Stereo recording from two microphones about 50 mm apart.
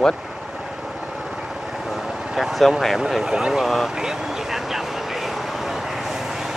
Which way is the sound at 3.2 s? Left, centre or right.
Centre.